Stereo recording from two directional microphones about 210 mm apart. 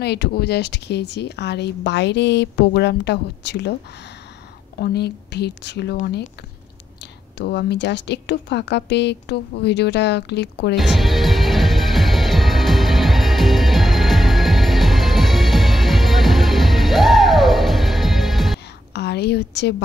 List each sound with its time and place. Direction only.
0.0 s speech: 50° left (ahead or behind)
4.7 s speech: 50° left (ahead or behind)
7.3 s a woman's voice: 55° left (ahead or behind)
10.8 s music: centre (ahead or behind)
18.9 s a woman's voice: 50° left (ahead or behind)